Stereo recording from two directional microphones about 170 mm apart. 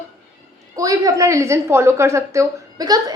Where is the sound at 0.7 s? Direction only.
20° right (ahead or behind).